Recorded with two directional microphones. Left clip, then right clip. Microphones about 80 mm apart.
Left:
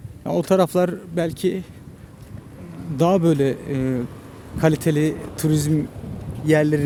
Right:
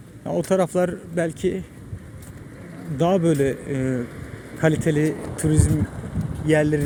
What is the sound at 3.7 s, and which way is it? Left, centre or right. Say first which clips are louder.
Speech: left 1 dB; left.